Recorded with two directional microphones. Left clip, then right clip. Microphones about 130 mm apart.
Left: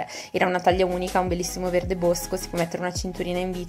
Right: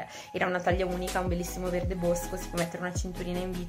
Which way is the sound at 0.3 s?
40° left (ahead or behind).